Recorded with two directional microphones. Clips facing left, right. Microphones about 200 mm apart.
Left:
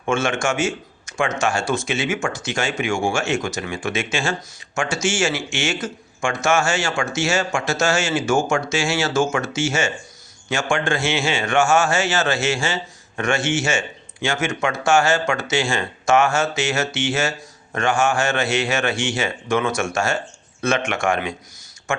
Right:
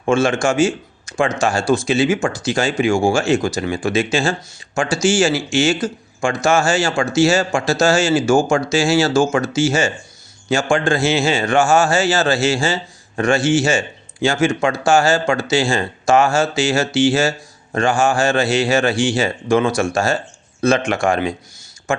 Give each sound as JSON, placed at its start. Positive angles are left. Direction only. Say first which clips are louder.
{"t": 0.0, "sound": "a man's voice", "louder": "right 5 dB", "side_deg": -35}